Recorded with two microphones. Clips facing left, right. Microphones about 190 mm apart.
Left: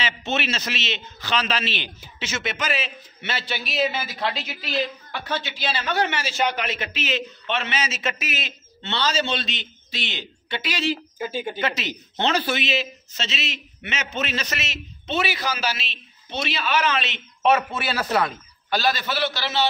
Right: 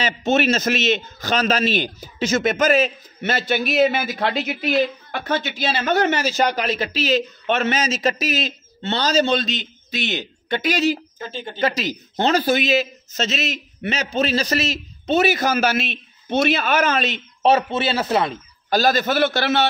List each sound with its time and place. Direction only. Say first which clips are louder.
0.0 s a man's voice: right 8 dB; 45° right (ahead or behind)
11.1 s speech: left 3 dB; 10° left (ahead or behind)
11.6 s a man's voice: right 5 dB; 40° right (ahead or behind)
18.7 s a man's voice: right 6 dB; 45° right (ahead or behind)